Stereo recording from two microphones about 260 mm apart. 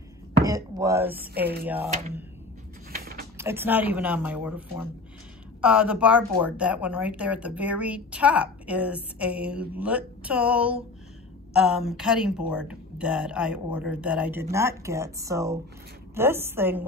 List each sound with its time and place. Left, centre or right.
0.5 s speech: centre
1.4 s speech: right
2.9 s a sound: right
3.3 s a woman's voice: centre